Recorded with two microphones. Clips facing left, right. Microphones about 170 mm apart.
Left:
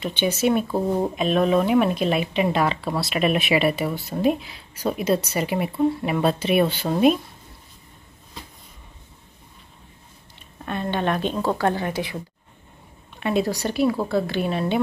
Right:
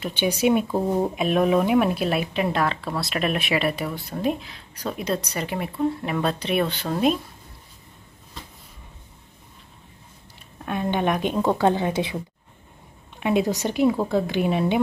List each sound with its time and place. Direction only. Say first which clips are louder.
0.0 s speech: even; 10° right (ahead or behind); by 7.2 s 5° left (ahead or behind)
10.6 s speech: right 1 dB; 10° right (ahead or behind)
13.2 s speech: right 1 dB; 15° right (ahead or behind)